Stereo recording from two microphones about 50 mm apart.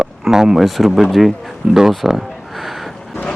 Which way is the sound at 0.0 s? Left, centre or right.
Centre.